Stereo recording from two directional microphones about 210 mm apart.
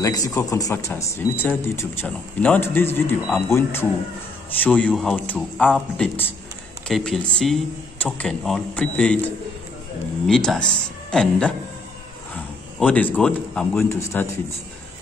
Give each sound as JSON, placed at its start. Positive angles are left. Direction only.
{"t": 0.0, "sound": "speech", "side_deg": 15}
{"t": 10.2, "sound": "speech", "side_deg": 0}
{"t": 12.7, "sound": "speech", "side_deg": 5}